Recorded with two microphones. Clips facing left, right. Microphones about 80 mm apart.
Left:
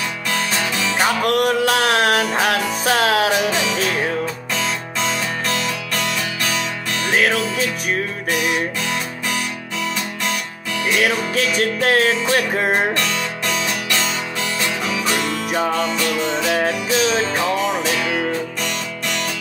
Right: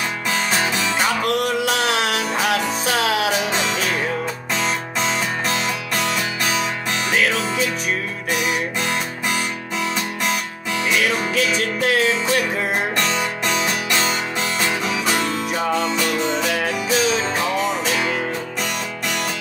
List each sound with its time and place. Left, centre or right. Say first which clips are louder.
0.3 s music: right 1 dB; centre
1.2 s music: left 3 dB; left
4.6 s music: right 1 dB; centre
7.1 s music: left 3 dB; left
11.0 s music: left 2 dB; left
12.9 s music: right 1 dB; centre
14.9 s music: even; centre
16.5 s music: left 2 dB; left
17.6 s music: left 1 dB; centre